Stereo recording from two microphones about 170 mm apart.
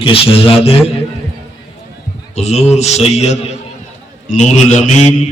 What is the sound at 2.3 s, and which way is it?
A man's voice, 40° left (ahead or behind).